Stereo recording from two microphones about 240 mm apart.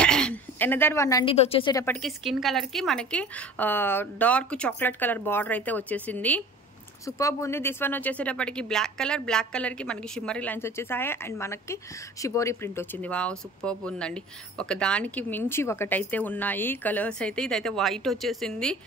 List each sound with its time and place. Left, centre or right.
0.0 s a sound: centre
1.3 s speech: left
2.0 s a woman's voice: centre